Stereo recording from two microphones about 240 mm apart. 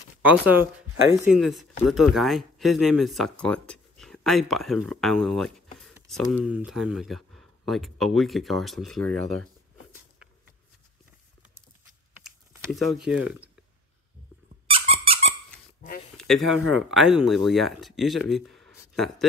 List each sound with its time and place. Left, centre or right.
0.2 s speech: centre
12.7 s speech: centre
14.7 s squeak: right
16.2 s speech: centre